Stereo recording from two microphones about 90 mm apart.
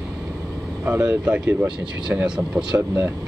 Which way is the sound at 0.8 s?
25° right (ahead or behind).